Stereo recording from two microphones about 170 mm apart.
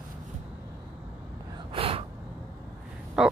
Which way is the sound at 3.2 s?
5° right (ahead or behind).